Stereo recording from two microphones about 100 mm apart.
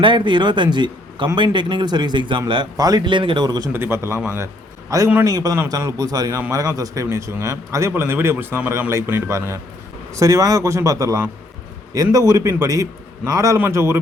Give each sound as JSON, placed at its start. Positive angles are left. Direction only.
{"t": 0.0, "sound": "a man's voice", "side_deg": -55}
{"t": 2.7, "sound": "a man's voice", "side_deg": -40}
{"t": 3.7, "sound": "a man's voice", "side_deg": -25}